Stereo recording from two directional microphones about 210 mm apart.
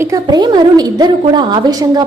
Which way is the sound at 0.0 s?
15° right (ahead or behind).